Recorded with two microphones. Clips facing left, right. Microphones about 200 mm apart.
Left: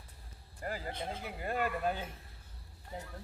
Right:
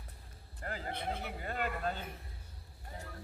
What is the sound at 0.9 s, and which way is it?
Speech, 60° right (ahead or behind).